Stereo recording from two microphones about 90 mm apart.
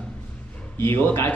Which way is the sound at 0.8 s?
25° left (ahead or behind).